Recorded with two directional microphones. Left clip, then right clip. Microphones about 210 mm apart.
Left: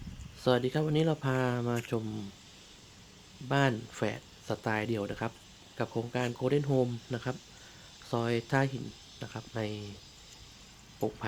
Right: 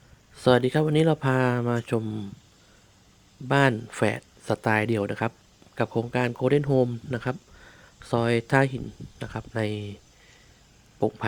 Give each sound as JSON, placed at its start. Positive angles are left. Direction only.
{"t": 0.3, "sound": "speech", "side_deg": -45}
{"t": 3.5, "sound": "speech", "side_deg": -45}